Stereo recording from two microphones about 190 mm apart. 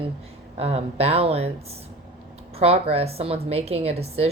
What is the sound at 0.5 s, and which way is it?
Speech, 35° right (ahead or behind).